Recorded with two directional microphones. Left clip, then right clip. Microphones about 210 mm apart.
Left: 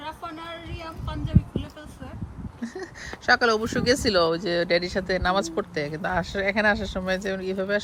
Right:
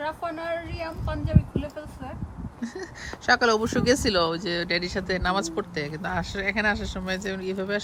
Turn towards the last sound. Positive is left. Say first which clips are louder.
# left 2 dB
turn(degrees=-5)  # may be behind; listen again after turning